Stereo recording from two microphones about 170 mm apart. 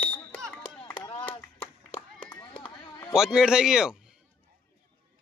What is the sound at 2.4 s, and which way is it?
Chop, 30° left (ahead or behind).